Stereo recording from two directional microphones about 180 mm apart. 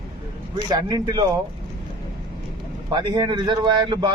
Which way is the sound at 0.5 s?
20° right (ahead or behind).